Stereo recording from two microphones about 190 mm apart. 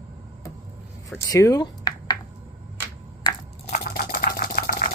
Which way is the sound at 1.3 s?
20° left (ahead or behind).